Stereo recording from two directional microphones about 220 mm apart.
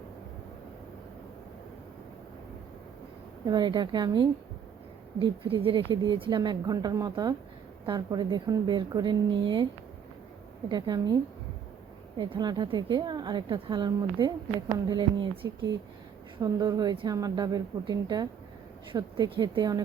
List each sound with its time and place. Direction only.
3.4 s a woman's voice: 20° right (ahead or behind)
10.7 s a woman's voice: 20° right (ahead or behind)